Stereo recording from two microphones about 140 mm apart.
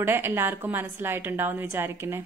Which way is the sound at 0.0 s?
15° right (ahead or behind).